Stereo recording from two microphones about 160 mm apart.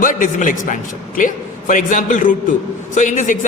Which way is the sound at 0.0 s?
55° left (ahead or behind).